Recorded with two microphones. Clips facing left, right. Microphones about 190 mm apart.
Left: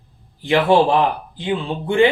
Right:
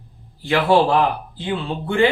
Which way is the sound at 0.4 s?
20° left (ahead or behind).